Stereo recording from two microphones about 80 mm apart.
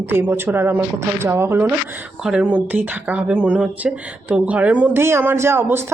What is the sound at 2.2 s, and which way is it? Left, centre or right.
Speech, centre.